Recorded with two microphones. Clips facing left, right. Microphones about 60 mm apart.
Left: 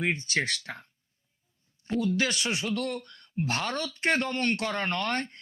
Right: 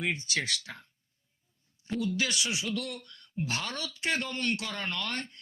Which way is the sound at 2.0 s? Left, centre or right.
Left.